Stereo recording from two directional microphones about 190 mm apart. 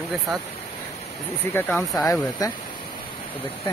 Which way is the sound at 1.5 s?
10° left (ahead or behind).